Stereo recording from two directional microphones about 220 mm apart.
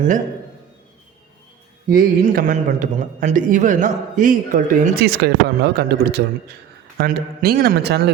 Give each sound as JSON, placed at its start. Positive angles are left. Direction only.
{"t": 1.9, "sound": "a man's voice", "side_deg": -40}